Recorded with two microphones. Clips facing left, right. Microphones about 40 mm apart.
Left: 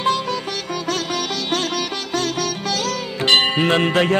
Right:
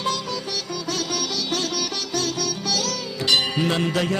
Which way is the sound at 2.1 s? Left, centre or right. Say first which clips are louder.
Left 4 dB; left.